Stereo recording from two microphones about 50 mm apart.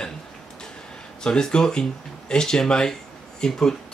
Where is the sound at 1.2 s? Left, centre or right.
Centre.